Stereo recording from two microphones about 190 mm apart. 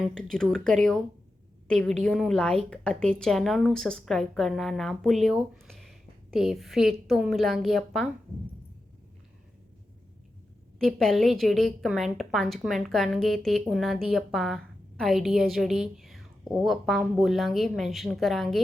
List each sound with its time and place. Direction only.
0.0 s a woman's voice: 5° left (ahead or behind)
10.8 s a woman's voice: centre (ahead or behind)